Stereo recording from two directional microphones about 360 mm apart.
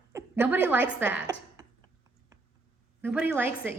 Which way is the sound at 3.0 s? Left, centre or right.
Centre.